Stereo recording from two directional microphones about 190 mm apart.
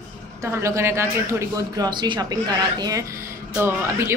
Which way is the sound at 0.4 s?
15° right (ahead or behind).